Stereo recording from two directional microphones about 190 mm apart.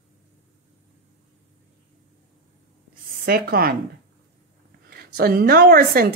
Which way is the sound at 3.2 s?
50° right (ahead or behind).